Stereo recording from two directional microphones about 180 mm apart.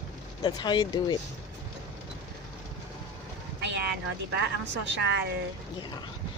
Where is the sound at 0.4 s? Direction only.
25° left (ahead or behind).